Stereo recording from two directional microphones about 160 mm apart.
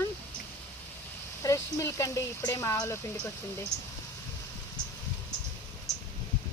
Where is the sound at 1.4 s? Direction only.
20° left (ahead or behind).